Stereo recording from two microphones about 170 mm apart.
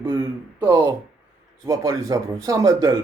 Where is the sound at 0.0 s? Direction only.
15° right (ahead or behind).